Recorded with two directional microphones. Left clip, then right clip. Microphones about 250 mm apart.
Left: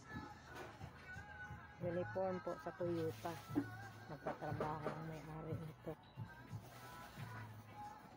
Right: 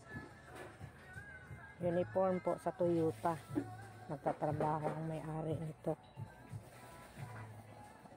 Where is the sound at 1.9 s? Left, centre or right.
Right.